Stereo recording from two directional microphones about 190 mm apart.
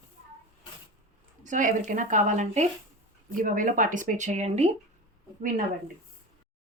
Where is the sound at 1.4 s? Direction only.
40° right (ahead or behind).